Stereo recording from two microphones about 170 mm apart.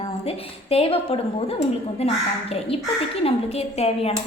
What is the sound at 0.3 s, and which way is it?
A woman's voice, 35° left (ahead or behind).